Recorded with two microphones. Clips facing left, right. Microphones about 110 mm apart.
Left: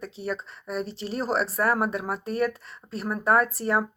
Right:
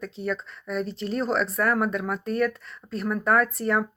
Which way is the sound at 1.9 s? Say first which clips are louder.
Right 1 dB; 30° left (ahead or behind).